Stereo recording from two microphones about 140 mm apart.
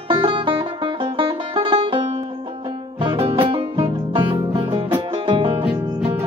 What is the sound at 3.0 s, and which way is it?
Music, 40° right (ahead or behind).